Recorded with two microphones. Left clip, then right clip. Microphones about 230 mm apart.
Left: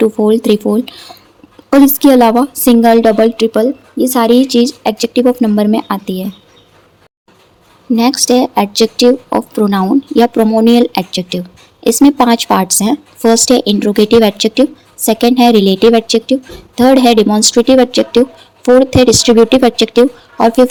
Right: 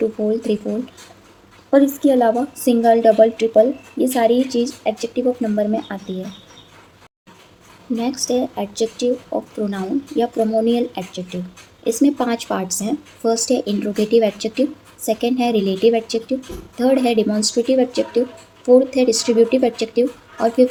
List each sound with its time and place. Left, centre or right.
0.3 s speech: left
2.0 s speech: left
7.9 s speech: left